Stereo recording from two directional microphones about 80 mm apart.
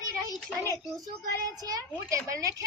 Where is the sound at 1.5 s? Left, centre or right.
Right.